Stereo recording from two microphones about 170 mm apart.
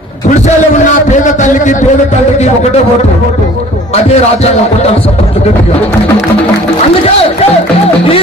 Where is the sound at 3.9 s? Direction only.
40° left (ahead or behind).